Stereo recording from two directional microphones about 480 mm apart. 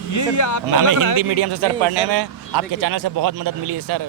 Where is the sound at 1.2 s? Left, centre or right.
Right.